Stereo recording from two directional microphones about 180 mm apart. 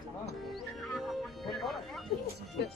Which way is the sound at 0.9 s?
Centre (ahead or behind).